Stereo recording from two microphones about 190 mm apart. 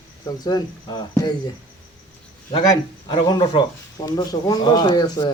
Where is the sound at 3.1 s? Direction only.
25° left (ahead or behind).